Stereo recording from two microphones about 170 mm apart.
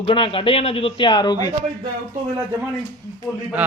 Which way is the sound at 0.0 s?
30° left (ahead or behind).